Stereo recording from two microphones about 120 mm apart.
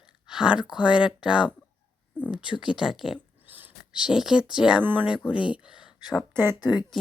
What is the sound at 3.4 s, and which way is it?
Speech, 15° right (ahead or behind).